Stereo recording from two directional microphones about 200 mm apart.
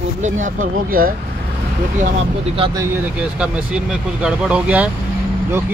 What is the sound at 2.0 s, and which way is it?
Speech, 35° right (ahead or behind).